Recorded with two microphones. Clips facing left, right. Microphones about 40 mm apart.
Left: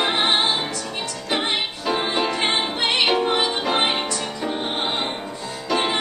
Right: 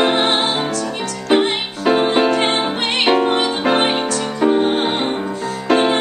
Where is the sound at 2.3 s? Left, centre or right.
Right.